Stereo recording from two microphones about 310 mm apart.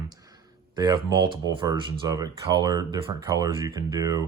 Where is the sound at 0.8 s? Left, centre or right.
Centre.